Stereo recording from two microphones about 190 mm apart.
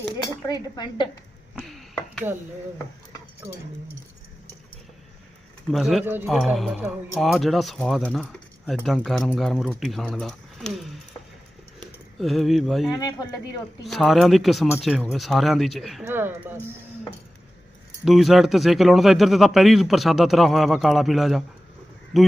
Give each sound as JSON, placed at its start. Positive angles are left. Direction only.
{"t": 0.2, "sound": "speech", "side_deg": 20}
{"t": 1.5, "sound": "a sound", "side_deg": 0}
{"t": 5.7, "sound": "speech", "side_deg": 0}
{"t": 12.9, "sound": "speech", "side_deg": 20}
{"t": 13.8, "sound": "speech", "side_deg": 0}
{"t": 18.0, "sound": "speech", "side_deg": 0}